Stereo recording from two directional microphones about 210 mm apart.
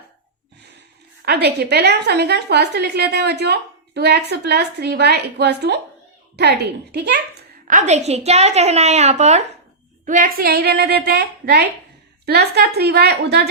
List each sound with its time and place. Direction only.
1.2 s a woman's voice: 50° right (ahead or behind)
7.7 s a woman's voice: 35° right (ahead or behind); by 13.5 s 50° right (ahead or behind)